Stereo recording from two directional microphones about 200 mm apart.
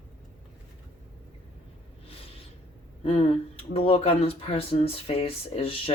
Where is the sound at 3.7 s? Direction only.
30° left (ahead or behind).